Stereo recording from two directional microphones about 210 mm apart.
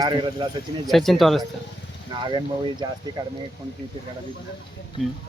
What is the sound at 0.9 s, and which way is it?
Speech, centre (ahead or behind).